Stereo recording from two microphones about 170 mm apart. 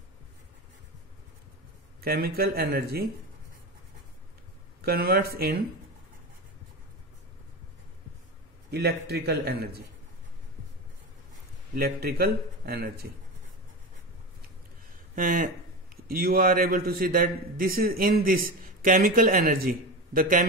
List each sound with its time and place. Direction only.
2.0 s a man's voice: 65° right (ahead or behind)
4.8 s a man's voice: 65° right (ahead or behind)
8.6 s a man's voice: 70° right (ahead or behind)
11.7 s a man's voice: 65° right (ahead or behind)
15.1 s a man's voice: 55° right (ahead or behind)